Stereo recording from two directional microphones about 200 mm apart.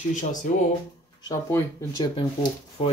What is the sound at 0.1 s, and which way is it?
Speech, 40° left (ahead or behind).